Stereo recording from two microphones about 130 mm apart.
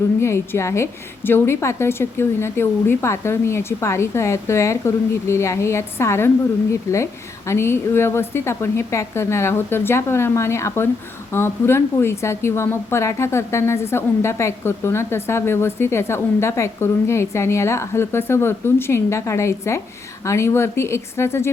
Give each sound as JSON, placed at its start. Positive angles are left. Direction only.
{"t": 0.2, "sound": "a woman's voice", "side_deg": 20}